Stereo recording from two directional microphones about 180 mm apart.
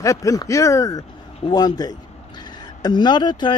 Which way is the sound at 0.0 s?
15° left (ahead or behind).